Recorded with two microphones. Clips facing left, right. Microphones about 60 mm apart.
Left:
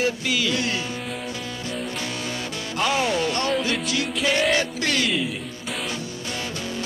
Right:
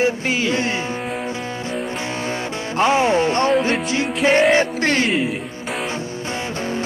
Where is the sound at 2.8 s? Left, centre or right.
Right.